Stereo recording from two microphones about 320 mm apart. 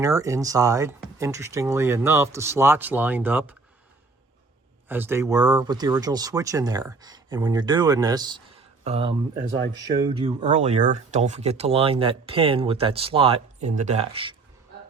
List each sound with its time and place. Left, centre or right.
0.0 s speech: centre
4.9 s speech: centre